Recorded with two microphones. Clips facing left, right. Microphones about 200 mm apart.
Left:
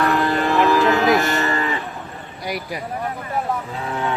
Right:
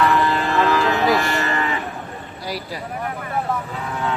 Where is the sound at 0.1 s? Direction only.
55° left (ahead or behind).